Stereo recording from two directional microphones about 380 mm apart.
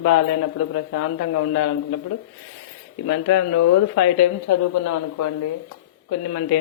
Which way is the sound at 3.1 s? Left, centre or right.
Left.